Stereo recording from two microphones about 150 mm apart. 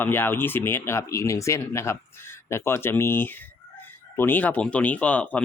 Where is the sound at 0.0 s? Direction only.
15° left (ahead or behind).